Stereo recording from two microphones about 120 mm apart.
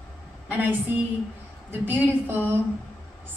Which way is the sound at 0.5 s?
15° right (ahead or behind).